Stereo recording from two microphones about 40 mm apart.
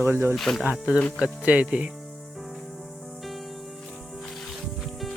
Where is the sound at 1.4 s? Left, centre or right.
Right.